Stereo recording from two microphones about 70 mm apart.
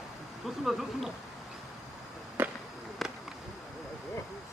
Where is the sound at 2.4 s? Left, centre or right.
Right.